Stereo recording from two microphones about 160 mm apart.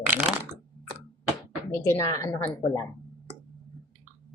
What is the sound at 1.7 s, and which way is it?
Speech, 20° left (ahead or behind).